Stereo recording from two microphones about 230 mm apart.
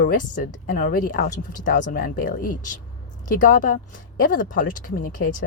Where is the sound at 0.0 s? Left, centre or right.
Left.